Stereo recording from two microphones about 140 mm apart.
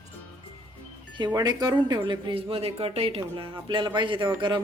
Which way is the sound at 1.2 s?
30° right (ahead or behind).